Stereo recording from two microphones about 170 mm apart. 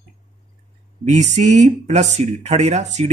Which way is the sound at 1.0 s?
40° right (ahead or behind).